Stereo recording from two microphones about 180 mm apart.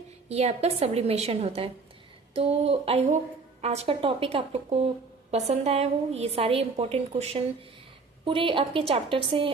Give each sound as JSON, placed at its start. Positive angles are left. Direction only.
{"t": 0.3, "sound": "a woman's voice", "side_deg": -35}